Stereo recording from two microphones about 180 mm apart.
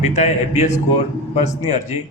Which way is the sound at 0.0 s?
40° left (ahead or behind).